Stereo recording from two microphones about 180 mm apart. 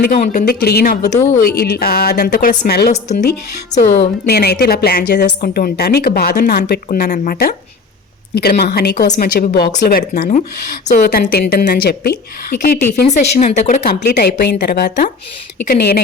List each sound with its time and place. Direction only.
0.0 s a woman's voice: 50° left (ahead or behind)
2.9 s speech: 40° left (ahead or behind)
3.8 s a woman's voice: 60° left (ahead or behind)
6.8 s a woman's voice: 50° left (ahead or behind)
9.1 s a woman's voice: 50° left (ahead or behind)
13.1 s speech: 40° left (ahead or behind)
13.8 s a woman's voice: 60° left (ahead or behind)